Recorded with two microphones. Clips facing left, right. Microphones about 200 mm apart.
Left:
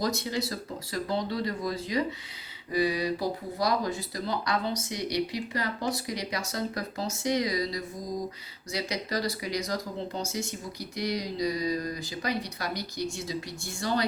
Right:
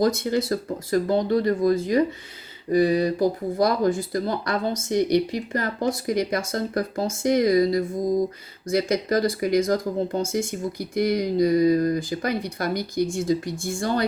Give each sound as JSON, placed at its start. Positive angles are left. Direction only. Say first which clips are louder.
{"t": 0.0, "sound": "speech", "louder": "right 8 dB", "side_deg": -50}